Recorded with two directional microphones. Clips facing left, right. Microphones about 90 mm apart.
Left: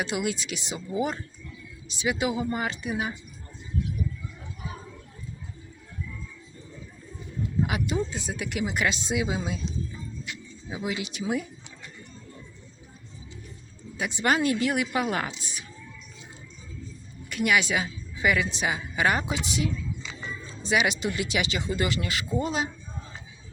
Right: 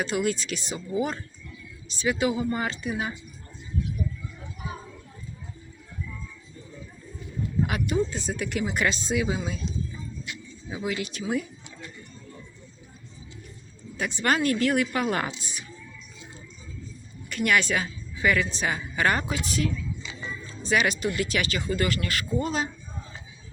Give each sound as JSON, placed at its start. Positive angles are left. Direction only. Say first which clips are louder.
{"t": 0.0, "sound": "speech", "louder": "right 2 dB", "side_deg": 10}
{"t": 7.7, "sound": "speech", "louder": "right 2 dB", "side_deg": 15}
{"t": 9.0, "sound": "speech", "louder": "right 1 dB", "side_deg": 15}
{"t": 10.7, "sound": "speech", "louder": "right 1 dB", "side_deg": 15}
{"t": 13.9, "sound": "a woman's voice", "louder": "even", "side_deg": 15}
{"t": 17.2, "sound": "a woman's voice", "louder": "even", "side_deg": 10}